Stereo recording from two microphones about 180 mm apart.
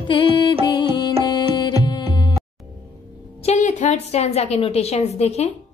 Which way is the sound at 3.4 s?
40° left (ahead or behind).